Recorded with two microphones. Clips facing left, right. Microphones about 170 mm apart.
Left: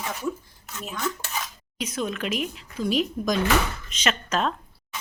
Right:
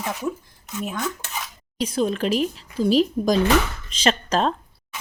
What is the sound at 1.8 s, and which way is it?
Speech, 30° right (ahead or behind).